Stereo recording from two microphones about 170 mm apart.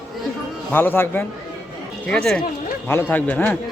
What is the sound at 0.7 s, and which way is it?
A woman's voice, 10° left (ahead or behind).